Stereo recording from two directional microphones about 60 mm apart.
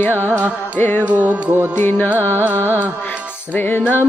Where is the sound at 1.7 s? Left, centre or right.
Left.